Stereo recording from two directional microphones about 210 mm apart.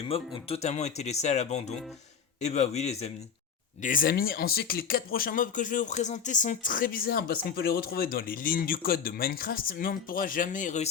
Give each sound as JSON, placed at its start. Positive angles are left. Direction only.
{"t": 0.0, "sound": "speech", "side_deg": 25}
{"t": 3.8, "sound": "speech", "side_deg": 45}